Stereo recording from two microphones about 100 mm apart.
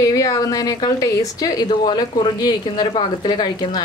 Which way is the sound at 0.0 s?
35° left (ahead or behind).